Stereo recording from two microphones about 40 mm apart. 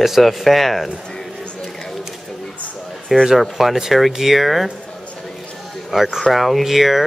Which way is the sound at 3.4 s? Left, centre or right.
Centre.